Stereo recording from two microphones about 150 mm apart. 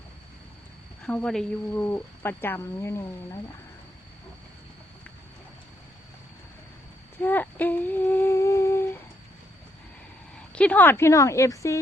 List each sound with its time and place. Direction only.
1.0 s a woman's voice: 5° left (ahead or behind)
7.2 s humming: 10° left (ahead or behind)
10.5 s a woman's voice: 10° left (ahead or behind)